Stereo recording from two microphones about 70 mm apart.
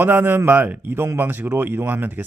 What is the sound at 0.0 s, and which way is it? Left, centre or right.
Speech, right.